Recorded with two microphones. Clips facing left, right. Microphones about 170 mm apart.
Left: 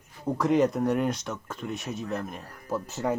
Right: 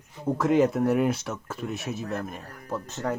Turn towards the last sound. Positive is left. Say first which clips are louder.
# left 1 dB
turn(degrees=10)  # may be behind; listen again after turning